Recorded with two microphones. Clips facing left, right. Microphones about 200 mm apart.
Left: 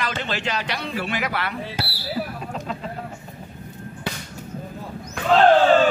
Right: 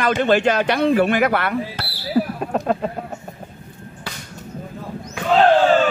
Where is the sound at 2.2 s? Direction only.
55° right (ahead or behind).